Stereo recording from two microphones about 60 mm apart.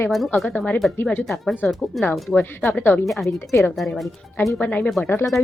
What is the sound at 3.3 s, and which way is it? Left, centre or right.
Speech, left.